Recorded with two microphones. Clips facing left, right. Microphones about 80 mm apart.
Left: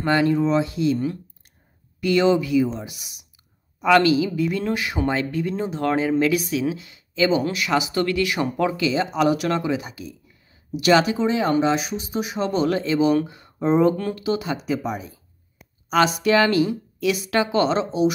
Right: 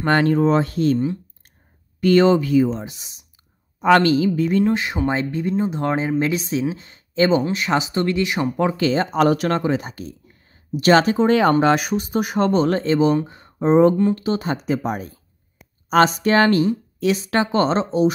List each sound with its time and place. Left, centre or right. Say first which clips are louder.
0.0 s speech: right 2 dB; right
2.0 s a woman's voice: right 4 dB; right
4.6 s speech: right 3 dB; right
8.7 s a woman's voice: right 3 dB; right
11.2 s a woman's voice: right 4 dB; right